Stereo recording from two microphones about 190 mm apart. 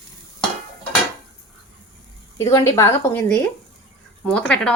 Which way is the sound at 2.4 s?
15° left (ahead or behind).